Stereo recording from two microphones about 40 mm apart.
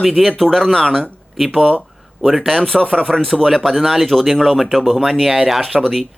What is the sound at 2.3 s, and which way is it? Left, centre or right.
Speech, centre.